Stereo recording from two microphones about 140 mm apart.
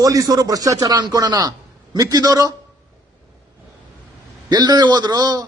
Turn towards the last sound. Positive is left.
turn(degrees=-30)  # may be behind; listen again after turning